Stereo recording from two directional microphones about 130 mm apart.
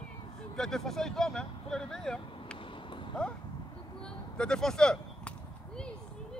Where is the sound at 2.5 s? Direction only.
40° left (ahead or behind).